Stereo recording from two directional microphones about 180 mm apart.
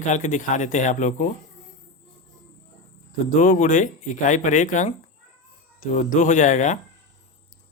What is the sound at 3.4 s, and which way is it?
Speech, 45° left (ahead or behind).